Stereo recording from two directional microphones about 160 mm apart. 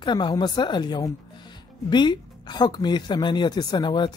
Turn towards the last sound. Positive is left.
turn(degrees=30)  # may be behind; listen again after turning